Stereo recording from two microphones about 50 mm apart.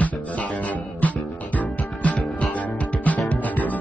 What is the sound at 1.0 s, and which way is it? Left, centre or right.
Music, left.